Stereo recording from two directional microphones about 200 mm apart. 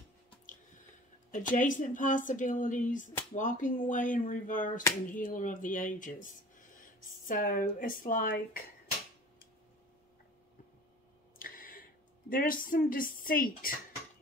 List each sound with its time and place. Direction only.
1.3 s a woman's voice: 40° left (ahead or behind)
11.3 s a sound: 45° left (ahead or behind)
12.3 s speech: 45° left (ahead or behind)